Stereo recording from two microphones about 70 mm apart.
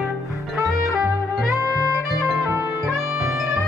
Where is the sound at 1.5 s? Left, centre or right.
Left.